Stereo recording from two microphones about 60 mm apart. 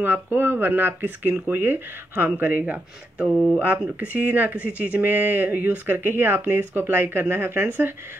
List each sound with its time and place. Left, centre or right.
0.0 s speech: right